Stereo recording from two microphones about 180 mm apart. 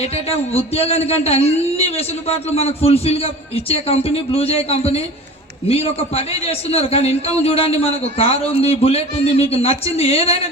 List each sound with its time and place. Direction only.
0.0 s a man's voice: 35° left (ahead or behind)